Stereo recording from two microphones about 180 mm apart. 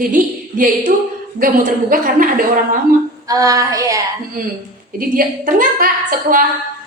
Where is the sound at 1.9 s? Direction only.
50° right (ahead or behind).